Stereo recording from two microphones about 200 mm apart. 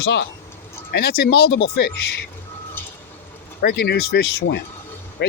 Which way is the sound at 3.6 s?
55° left (ahead or behind).